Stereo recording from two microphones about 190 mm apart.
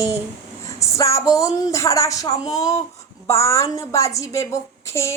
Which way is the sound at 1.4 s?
15° left (ahead or behind).